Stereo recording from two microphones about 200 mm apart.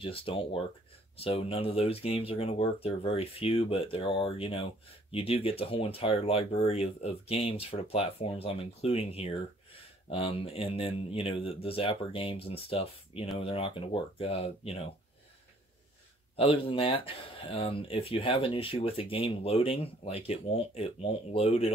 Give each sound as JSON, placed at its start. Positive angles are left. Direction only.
{"t": 0.0, "sound": "speech", "side_deg": 25}
{"t": 16.3, "sound": "speech", "side_deg": 25}